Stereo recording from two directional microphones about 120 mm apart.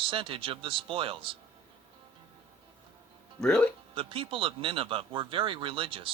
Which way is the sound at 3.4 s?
5° left (ahead or behind).